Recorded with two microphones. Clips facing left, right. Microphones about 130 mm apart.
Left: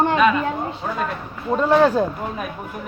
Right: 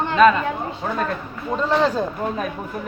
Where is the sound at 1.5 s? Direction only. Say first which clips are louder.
Left 4 dB; 10° left (ahead or behind).